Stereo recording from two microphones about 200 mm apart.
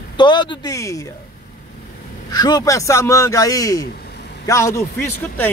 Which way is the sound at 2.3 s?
20° left (ahead or behind).